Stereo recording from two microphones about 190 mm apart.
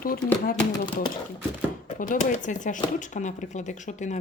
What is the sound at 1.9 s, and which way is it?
A woman's voice, 40° left (ahead or behind).